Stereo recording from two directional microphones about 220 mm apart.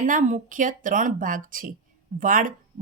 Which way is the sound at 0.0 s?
35° right (ahead or behind).